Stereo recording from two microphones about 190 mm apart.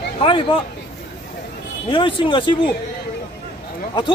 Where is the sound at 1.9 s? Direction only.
25° left (ahead or behind).